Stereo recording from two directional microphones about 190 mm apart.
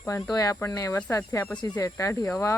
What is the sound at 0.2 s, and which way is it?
Speech, 20° left (ahead or behind).